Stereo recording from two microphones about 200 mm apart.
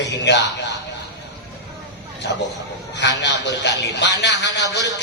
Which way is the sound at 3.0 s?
60° left (ahead or behind).